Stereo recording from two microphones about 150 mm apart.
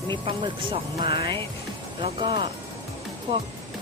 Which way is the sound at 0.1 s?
35° right (ahead or behind).